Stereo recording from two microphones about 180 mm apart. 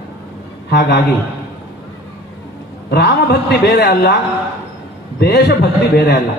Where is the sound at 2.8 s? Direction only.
65° left (ahead or behind).